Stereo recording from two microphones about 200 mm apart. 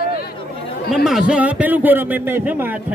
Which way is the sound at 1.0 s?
5° right (ahead or behind).